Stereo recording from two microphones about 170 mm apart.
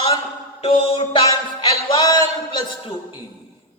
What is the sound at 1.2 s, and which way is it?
Music, 20° left (ahead or behind).